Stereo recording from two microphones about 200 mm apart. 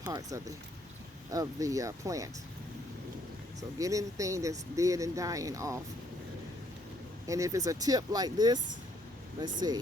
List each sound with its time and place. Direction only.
0.0 s speech: 15° right (ahead or behind)
3.6 s speech: 15° right (ahead or behind)
7.3 s speech: 15° right (ahead or behind)